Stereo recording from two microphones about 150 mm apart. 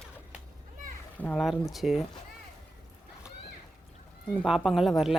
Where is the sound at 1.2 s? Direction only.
10° left (ahead or behind).